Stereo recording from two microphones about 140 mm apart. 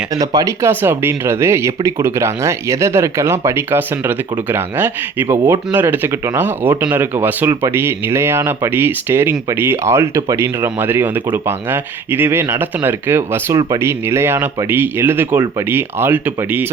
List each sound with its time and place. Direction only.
0.1 s speech: 25° right (ahead or behind)